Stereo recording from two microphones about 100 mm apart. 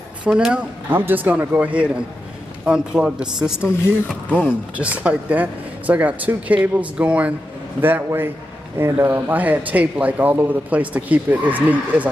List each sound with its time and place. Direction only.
0.2 s speech: 10° right (ahead or behind)
0.8 s speech: 20° right (ahead or behind)
4.3 s speech: 15° left (ahead or behind)
4.7 s a man's voice: 15° right (ahead or behind)